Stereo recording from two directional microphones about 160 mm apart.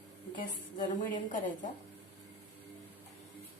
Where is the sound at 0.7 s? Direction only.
60° left (ahead or behind).